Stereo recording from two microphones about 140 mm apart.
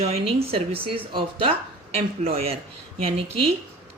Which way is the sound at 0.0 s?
45° right (ahead or behind).